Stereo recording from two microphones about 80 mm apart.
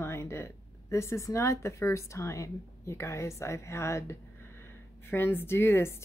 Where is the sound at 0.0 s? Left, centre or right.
Left.